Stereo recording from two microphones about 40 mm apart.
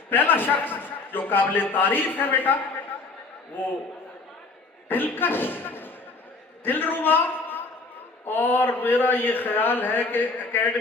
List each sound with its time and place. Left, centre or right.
0.1 s a man's voice: left
4.9 s a man's voice: left